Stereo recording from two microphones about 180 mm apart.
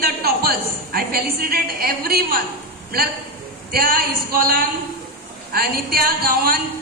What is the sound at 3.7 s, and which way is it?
A woman's voice, 55° right (ahead or behind).